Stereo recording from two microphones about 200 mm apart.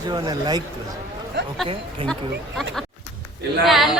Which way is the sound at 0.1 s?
20° right (ahead or behind).